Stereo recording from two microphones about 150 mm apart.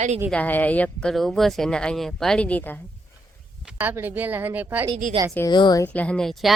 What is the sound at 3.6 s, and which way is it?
Speech, 10° right (ahead or behind).